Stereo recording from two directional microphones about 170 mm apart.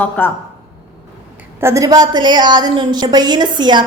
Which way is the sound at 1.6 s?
20° right (ahead or behind).